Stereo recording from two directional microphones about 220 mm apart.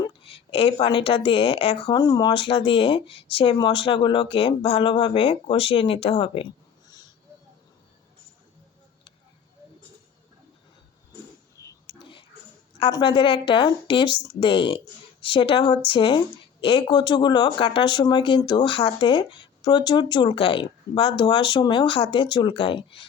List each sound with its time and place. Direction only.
0.0 s a woman's voice: 25° left (ahead or behind)
11.6 s a sound: 20° left (ahead or behind)
12.8 s a woman's voice: 20° left (ahead or behind)